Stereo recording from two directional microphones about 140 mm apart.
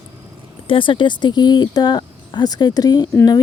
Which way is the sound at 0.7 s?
35° left (ahead or behind).